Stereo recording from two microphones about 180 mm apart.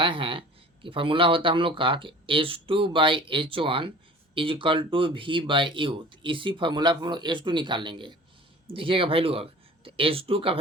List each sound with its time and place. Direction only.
0.0 s speech: 30° right (ahead or behind)